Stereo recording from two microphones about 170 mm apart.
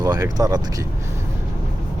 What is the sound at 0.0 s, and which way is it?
Speech, 20° right (ahead or behind).